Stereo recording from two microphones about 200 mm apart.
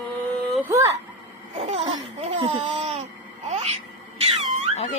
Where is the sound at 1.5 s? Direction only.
30° right (ahead or behind).